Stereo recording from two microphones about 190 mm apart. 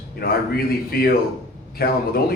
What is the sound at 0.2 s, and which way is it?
Speech, 55° left (ahead or behind).